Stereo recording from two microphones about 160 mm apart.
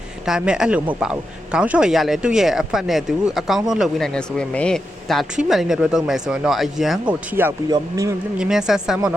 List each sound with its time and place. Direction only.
0.3 s speech: 5° right (ahead or behind)
7.1 s a man's voice: 10° right (ahead or behind)
8.4 s speech: 5° right (ahead or behind)